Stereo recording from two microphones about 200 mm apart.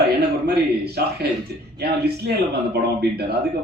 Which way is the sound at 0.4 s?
55° right (ahead or behind).